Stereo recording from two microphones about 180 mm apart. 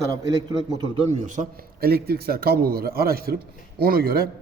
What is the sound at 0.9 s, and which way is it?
A man's voice, 40° right (ahead or behind).